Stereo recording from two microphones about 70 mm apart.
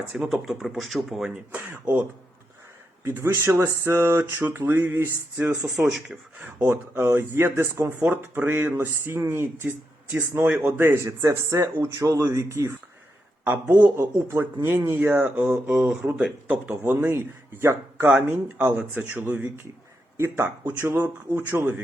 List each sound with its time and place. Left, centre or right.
0.1 s speech: centre
1.5 s speech: right
3.0 s speech: right
5.6 s speech: centre
6.6 s speech: right
8.0 s speech: right
13.4 s a man's voice: right
13.9 s a man's voice: right; by 16.0 s centre
16.8 s speech: right
18.8 s a man's voice: right
19.2 s speech: right